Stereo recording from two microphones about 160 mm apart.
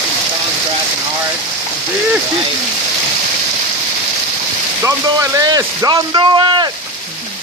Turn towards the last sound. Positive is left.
turn(degrees=-30)  # may be behind; listen again after turning